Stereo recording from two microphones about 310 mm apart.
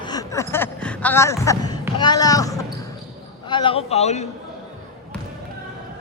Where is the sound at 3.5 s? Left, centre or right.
Centre.